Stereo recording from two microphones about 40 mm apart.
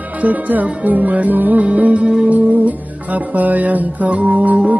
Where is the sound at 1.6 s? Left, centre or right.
Right.